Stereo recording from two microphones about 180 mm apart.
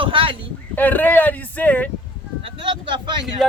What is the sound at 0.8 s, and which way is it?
Speech, 10° left (ahead or behind).